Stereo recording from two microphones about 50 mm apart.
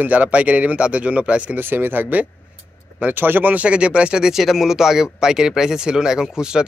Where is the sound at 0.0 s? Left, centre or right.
Right.